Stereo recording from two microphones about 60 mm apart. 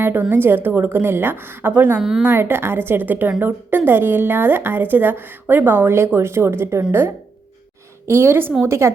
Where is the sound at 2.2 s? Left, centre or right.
Right.